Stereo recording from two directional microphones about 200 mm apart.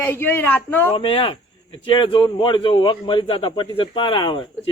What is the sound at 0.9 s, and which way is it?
A man's voice, 25° left (ahead or behind).